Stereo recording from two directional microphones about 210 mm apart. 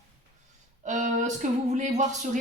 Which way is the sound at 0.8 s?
35° right (ahead or behind).